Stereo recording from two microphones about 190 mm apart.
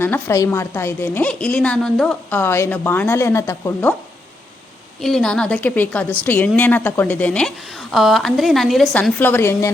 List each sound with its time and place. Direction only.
0.0 s a woman's voice: 15° left (ahead or behind)
4.9 s a woman's voice: centre (ahead or behind)